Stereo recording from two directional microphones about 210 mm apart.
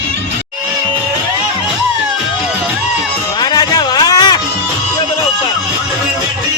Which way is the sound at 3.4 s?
20° left (ahead or behind).